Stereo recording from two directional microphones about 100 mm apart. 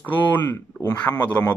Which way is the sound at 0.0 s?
15° left (ahead or behind).